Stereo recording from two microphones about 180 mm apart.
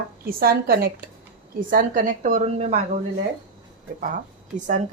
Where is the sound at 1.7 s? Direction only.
50° right (ahead or behind).